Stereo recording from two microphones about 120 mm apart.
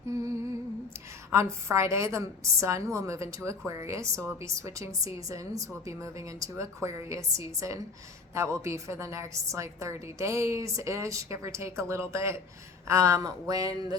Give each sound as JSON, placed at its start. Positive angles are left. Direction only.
{"t": 1.3, "sound": "a woman's voice", "side_deg": -25}